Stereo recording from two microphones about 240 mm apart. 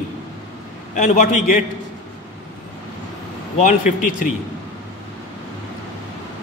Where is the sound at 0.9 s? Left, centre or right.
Left.